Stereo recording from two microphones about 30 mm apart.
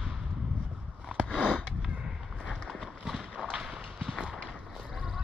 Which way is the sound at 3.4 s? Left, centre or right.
Right.